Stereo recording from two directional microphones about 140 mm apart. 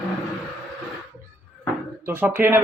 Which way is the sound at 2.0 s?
15° right (ahead or behind).